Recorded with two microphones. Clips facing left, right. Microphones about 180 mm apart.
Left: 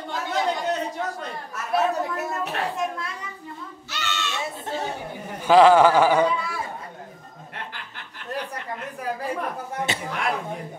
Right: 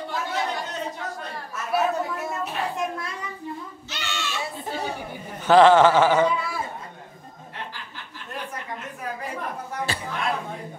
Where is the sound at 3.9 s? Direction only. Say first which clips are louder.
Left 2 dB; 15° right (ahead or behind).